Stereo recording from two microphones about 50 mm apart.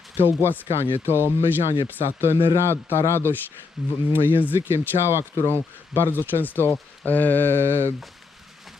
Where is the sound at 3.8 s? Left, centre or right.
Centre.